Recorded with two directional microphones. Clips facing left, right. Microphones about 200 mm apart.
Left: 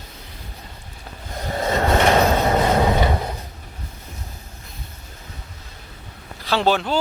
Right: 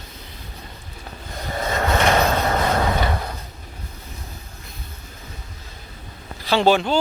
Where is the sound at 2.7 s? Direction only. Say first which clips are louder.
Left 3 dB; 15° left (ahead or behind).